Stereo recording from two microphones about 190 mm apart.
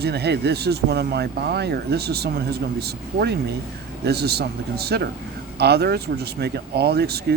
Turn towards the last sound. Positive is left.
turn(degrees=-60)  # may be behind; listen again after turning